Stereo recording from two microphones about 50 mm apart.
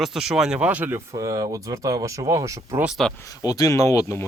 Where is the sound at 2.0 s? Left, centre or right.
Right.